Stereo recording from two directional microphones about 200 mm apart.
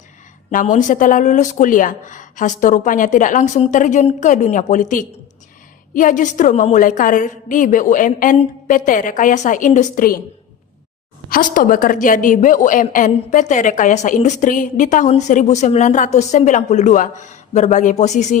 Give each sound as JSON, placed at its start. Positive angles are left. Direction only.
{"t": 0.5, "sound": "a woman's voice", "side_deg": 40}
{"t": 11.3, "sound": "a woman's voice", "side_deg": 45}